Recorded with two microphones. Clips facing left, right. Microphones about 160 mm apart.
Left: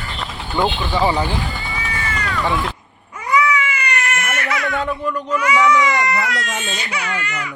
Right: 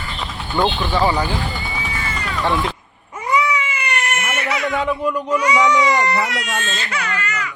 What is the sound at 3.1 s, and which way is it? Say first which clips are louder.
Cat: left 1 dB; 25° right (ahead or behind).